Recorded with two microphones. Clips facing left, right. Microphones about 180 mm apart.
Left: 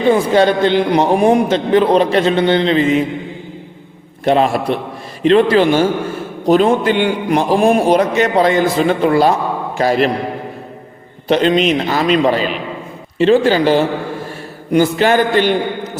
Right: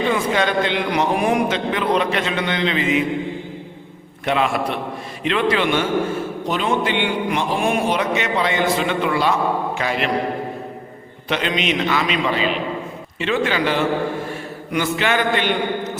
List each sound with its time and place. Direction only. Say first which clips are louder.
0.1 s a man's voice: left 8 dB; 35° left (ahead or behind)
4.3 s a man's voice: left 6 dB; 35° left (ahead or behind)
11.3 s a man's voice: left 9 dB; 35° left (ahead or behind)